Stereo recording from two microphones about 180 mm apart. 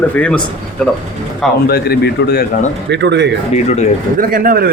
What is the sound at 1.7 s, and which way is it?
Speech, 60° left (ahead or behind).